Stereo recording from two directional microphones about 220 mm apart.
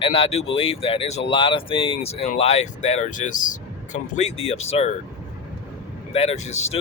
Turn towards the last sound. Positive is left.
turn(degrees=30)  # may be behind; listen again after turning